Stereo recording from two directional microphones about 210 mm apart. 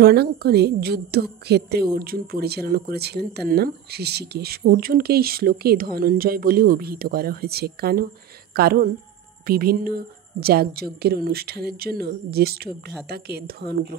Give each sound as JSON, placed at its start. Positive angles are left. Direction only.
{"t": 0.0, "sound": "a woman's voice", "side_deg": -50}